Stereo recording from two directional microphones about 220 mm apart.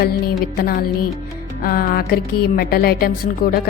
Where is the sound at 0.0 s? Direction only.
45° left (ahead or behind).